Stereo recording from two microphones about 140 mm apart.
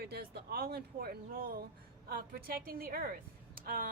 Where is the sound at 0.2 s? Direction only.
90° right.